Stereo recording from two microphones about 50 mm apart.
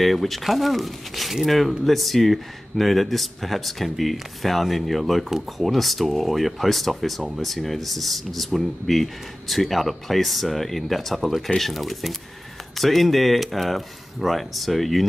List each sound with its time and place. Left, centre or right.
0.0 s speech: centre